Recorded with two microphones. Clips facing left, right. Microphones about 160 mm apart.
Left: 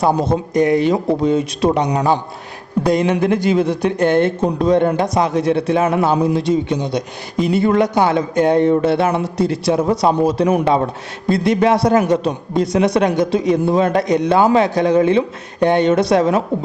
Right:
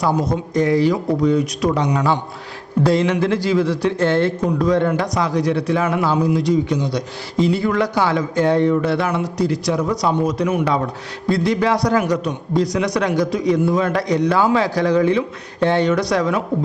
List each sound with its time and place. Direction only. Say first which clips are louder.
0.0 s a man's voice: left 3 dB; 25° left (ahead or behind)